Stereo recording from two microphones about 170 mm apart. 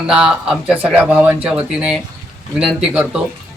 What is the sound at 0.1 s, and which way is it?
Speech, 5° right (ahead or behind).